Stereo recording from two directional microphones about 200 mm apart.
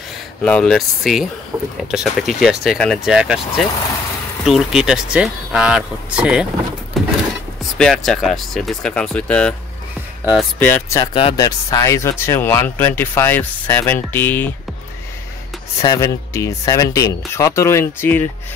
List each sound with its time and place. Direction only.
0.4 s speech: 5° left (ahead or behind)
7.0 s a sound: centre (ahead or behind)
7.7 s speech: centre (ahead or behind)
10.6 s speech: 10° left (ahead or behind)
11.1 s speech: 25° left (ahead or behind)
15.8 s speech: 15° left (ahead or behind)